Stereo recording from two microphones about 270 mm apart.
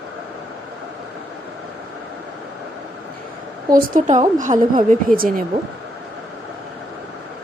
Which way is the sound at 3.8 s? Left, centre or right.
Right.